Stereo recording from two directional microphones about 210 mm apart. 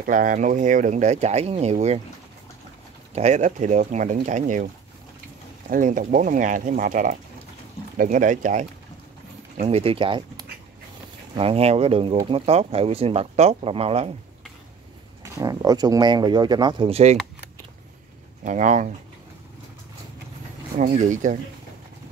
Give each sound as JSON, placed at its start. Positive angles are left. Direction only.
{"t": 0.0, "sound": "speech", "side_deg": -40}
{"t": 3.2, "sound": "speech", "side_deg": -35}
{"t": 5.7, "sound": "speech", "side_deg": -40}
{"t": 15.3, "sound": "speech", "side_deg": -20}
{"t": 18.4, "sound": "speech", "side_deg": -35}
{"t": 20.7, "sound": "speech", "side_deg": -35}